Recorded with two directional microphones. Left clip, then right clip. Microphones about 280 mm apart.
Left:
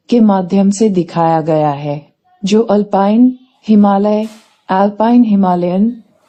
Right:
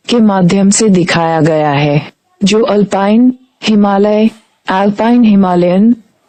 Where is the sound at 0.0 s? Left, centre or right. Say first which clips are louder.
Right 1 dB; right.